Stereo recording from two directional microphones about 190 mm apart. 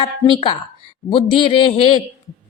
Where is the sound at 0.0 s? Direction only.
25° left (ahead or behind).